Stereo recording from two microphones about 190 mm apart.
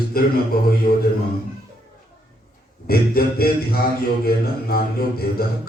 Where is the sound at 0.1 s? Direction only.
50° left (ahead or behind).